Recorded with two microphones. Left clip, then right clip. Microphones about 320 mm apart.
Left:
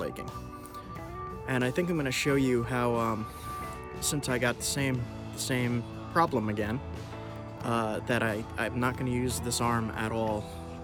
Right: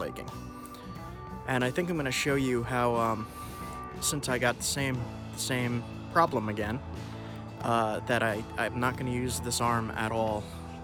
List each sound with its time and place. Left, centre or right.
1.5 s speech: centre